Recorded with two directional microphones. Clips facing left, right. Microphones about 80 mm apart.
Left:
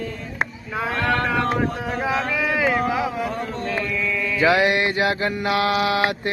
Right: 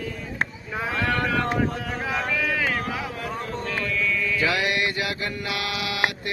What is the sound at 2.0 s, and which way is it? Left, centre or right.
Speech, centre.